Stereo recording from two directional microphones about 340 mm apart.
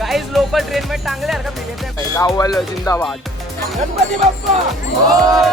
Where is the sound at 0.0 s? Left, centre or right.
Centre.